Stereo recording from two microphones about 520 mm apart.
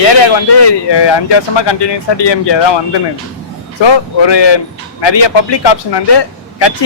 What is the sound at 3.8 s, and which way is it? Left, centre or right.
Speech, left.